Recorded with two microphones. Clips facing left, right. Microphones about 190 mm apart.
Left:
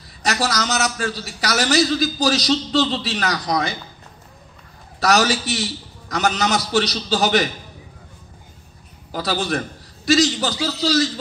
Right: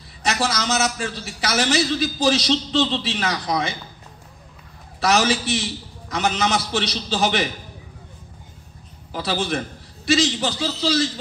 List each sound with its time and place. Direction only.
0.2 s a man's voice: 40° left (ahead or behind)
5.0 s a man's voice: 40° left (ahead or behind)
9.1 s a man's voice: 40° left (ahead or behind)